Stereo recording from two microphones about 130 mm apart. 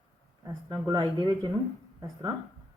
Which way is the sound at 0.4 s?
25° right (ahead or behind).